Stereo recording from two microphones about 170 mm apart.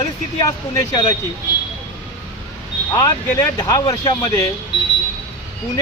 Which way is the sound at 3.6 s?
25° left (ahead or behind).